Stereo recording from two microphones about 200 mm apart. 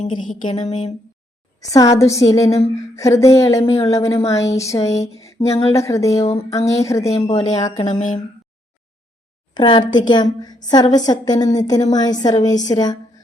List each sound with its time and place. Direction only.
0.0 s speech: 40° left (ahead or behind)
1.5 s speech: 15° left (ahead or behind)
7.3 s speech: 35° left (ahead or behind)
9.6 s a woman's voice: 25° left (ahead or behind)